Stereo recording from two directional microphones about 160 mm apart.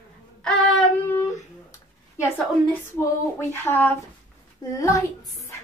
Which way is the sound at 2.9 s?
15° left (ahead or behind).